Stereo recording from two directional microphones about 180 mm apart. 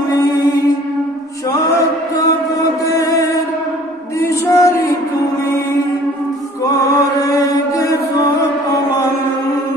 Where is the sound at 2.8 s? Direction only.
20° left (ahead or behind).